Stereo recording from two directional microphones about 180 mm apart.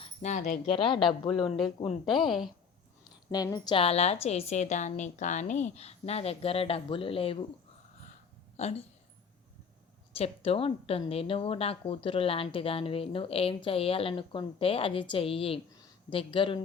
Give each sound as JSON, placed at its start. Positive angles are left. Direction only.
{"t": 0.0, "sound": "speech", "side_deg": 40}
{"t": 0.7, "sound": "a woman's voice", "side_deg": 30}
{"t": 1.5, "sound": "a woman's voice", "side_deg": 0}
{"t": 3.3, "sound": "a woman's voice", "side_deg": 20}
{"t": 8.5, "sound": "speech", "side_deg": 35}
{"t": 10.2, "sound": "a woman's voice", "side_deg": 35}
{"t": 15.7, "sound": "a sound", "side_deg": 25}